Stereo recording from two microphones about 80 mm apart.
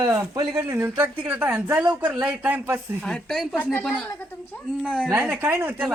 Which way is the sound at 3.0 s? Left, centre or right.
Centre.